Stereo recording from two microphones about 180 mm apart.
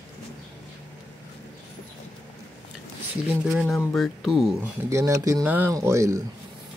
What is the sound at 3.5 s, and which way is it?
Speech, centre (ahead or behind).